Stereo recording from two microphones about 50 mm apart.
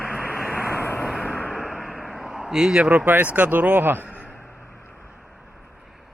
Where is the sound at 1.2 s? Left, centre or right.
Left.